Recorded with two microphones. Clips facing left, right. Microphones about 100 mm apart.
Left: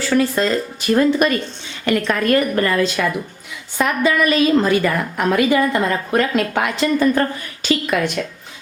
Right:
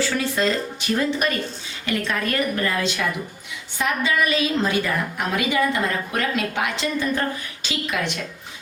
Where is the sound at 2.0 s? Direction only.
55° left (ahead or behind).